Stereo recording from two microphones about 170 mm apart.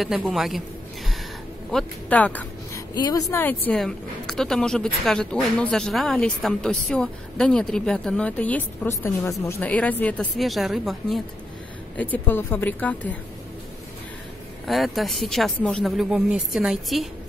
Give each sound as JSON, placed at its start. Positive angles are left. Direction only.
{"t": 0.0, "sound": "speech", "side_deg": 0}
{"t": 1.7, "sound": "speech", "side_deg": 5}
{"t": 2.9, "sound": "speech", "side_deg": 20}
{"t": 3.3, "sound": "speech", "side_deg": 10}
{"t": 12.0, "sound": "a woman's voice", "side_deg": 10}
{"t": 14.7, "sound": "speech", "side_deg": 0}